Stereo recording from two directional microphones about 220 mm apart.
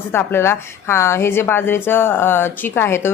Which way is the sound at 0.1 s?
10° left (ahead or behind).